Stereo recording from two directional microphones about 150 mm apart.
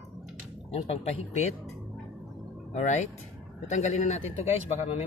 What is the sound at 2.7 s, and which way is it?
A man's voice, 50° left (ahead or behind).